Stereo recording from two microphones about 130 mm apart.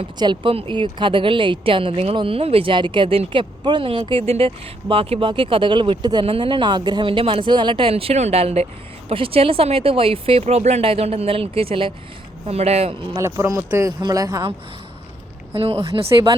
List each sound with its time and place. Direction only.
0.2 s a woman's voice: 40° right (ahead or behind)
12.5 s speech: 55° right (ahead or behind)
13.1 s speech: 20° right (ahead or behind)
15.5 s speech: 45° right (ahead or behind)
15.8 s speech: 25° right (ahead or behind)